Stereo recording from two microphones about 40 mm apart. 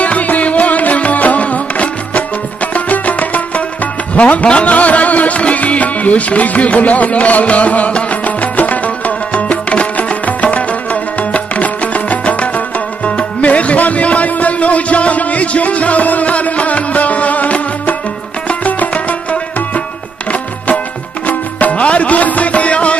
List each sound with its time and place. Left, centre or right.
0.0 s music: left
20.2 s music: left